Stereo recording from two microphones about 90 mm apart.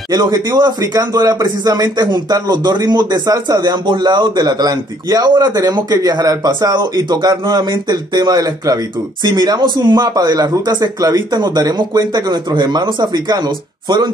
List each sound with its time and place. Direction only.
0.1 s a man's voice: 50° right (ahead or behind)